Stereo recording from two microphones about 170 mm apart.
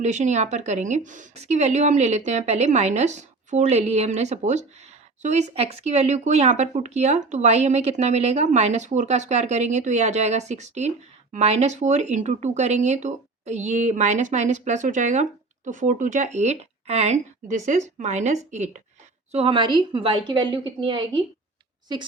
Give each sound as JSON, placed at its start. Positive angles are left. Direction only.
{"t": 0.0, "sound": "a woman's voice", "side_deg": -45}